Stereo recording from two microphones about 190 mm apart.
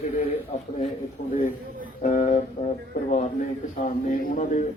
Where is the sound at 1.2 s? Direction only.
45° left (ahead or behind).